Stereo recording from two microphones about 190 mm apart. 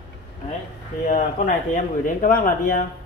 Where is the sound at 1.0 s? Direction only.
45° left (ahead or behind).